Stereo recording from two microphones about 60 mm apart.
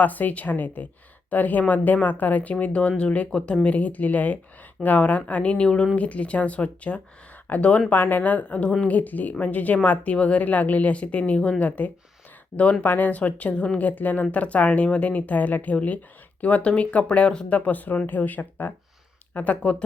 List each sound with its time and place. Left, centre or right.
0.0 s speech: left
12.8 s speech: left